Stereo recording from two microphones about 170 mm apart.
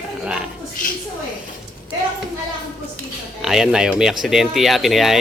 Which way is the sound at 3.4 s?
5° right (ahead or behind).